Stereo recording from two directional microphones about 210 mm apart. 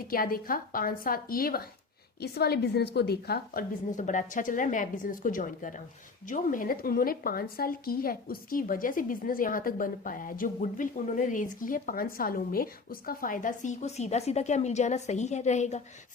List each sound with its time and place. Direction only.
0.1 s a woman's voice: 45° left (ahead or behind)